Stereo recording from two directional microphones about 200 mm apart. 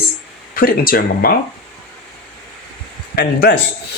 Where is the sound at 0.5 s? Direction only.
45° left (ahead or behind).